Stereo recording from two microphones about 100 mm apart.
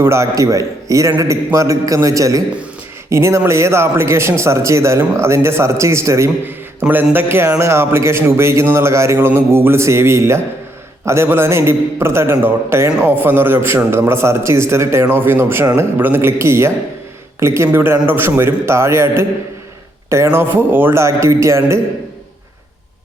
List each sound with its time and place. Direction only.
0.0 s a man's voice: 30° right (ahead or behind)